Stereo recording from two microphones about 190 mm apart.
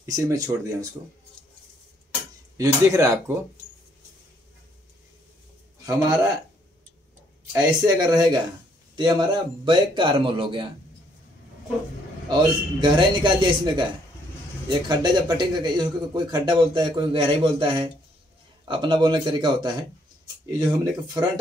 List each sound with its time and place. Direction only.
0.0 s speech: 15° right (ahead or behind)
2.5 s speech: 15° right (ahead or behind)
7.5 s speech: 20° right (ahead or behind)
12.3 s speech: 25° right (ahead or behind)
18.7 s speech: 25° right (ahead or behind)